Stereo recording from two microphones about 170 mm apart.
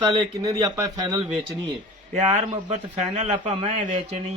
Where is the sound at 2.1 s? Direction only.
40° right (ahead or behind).